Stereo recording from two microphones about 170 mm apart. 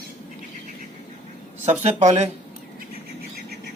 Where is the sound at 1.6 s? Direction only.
45° right (ahead or behind).